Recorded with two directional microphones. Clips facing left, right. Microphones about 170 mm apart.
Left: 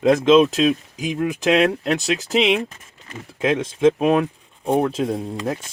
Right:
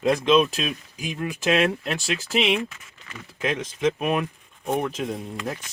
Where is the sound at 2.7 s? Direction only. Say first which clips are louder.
Left 5 dB; 35° left (ahead or behind).